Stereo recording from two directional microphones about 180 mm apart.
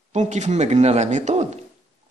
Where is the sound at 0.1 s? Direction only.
40° right (ahead or behind).